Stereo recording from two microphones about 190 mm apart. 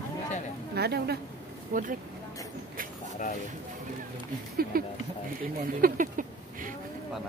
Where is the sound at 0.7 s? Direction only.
55° right (ahead or behind).